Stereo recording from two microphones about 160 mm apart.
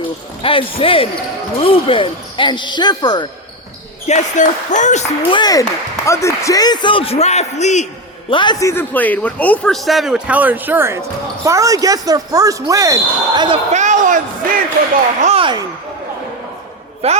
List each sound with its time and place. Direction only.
0.4 s a man's voice: 35° left (ahead or behind)
4.0 s speech: 50° left (ahead or behind)
5.3 s a man's voice: 25° left (ahead or behind); by 7.9 s 45° left (ahead or behind)
8.3 s a man's voice: 30° left (ahead or behind); by 13.6 s 25° right (ahead or behind)
13.7 s a man's voice: 50° right (ahead or behind)
15.2 s speech: 40° right (ahead or behind)
17.0 s a man's voice: 40° right (ahead or behind)